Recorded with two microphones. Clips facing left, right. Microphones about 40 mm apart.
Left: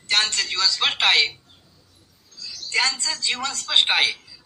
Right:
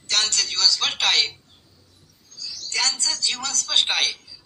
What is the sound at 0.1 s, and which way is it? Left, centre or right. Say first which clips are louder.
A woman's voice: left 2 dB; left.